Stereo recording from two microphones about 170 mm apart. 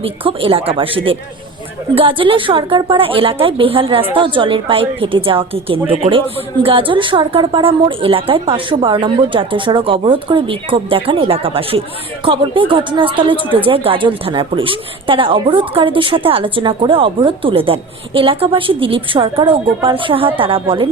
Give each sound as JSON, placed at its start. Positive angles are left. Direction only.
{"t": 0.0, "sound": "a woman's voice", "side_deg": -30}